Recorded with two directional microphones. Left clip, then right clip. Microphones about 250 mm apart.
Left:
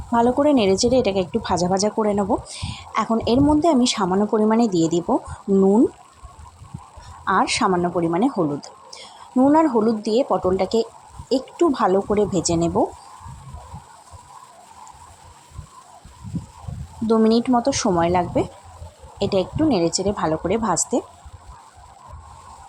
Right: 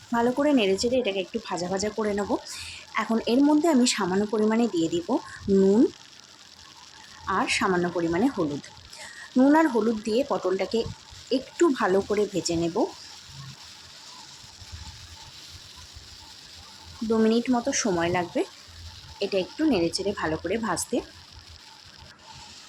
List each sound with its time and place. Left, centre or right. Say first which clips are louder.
0.1 s a woman's voice: left 6 dB; centre
7.3 s a woman's voice: left 6 dB; centre
17.1 s a woman's voice: left 6 dB; left